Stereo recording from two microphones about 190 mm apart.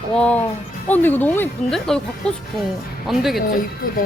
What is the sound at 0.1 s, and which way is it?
Speech, 5° left (ahead or behind).